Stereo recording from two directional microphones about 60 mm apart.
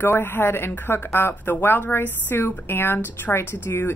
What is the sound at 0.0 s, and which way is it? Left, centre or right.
A woman's voice, left.